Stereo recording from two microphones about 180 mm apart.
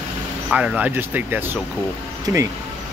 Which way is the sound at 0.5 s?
5° right (ahead or behind).